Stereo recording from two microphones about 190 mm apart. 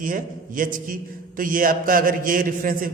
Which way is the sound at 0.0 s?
45° right (ahead or behind).